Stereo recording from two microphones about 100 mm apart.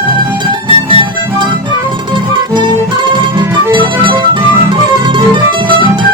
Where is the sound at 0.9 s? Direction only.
55° right (ahead or behind).